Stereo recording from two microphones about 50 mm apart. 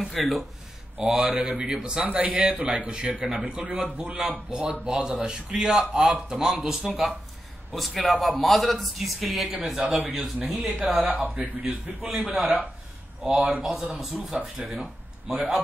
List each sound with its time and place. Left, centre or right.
0.0 s a man's voice: centre
0.9 s mantra: centre
1.2 s a man's voice: right; by 10.0 s centre
10.8 s a man's voice: right
12.0 s a man's voice: centre
13.6 s speech: centre